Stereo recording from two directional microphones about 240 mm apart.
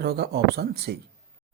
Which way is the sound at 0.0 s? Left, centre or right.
Right.